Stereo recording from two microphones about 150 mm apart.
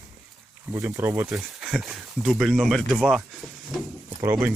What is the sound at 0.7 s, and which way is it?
Speech, 20° right (ahead or behind).